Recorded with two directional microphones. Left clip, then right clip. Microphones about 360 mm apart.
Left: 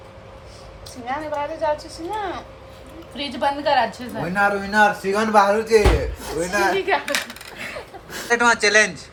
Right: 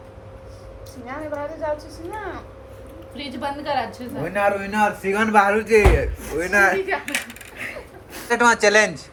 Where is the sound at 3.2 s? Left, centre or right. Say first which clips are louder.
Left 6 dB; left.